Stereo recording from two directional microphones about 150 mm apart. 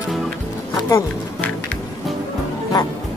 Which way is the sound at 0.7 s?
25° left (ahead or behind).